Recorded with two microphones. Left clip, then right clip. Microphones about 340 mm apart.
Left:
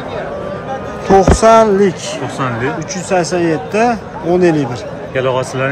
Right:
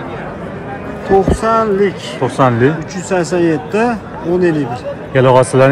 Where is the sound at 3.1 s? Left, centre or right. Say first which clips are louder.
Even; centre.